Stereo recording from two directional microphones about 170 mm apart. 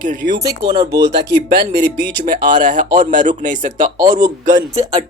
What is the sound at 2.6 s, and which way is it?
Speech, 50° right (ahead or behind).